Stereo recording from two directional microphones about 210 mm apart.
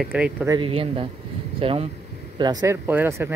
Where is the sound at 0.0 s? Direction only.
5° right (ahead or behind).